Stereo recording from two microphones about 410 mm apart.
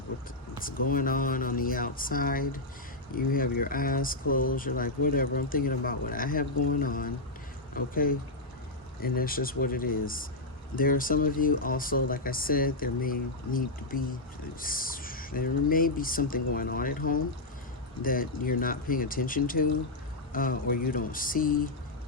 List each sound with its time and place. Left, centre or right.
0.6 s speech: left
9.0 s speech: left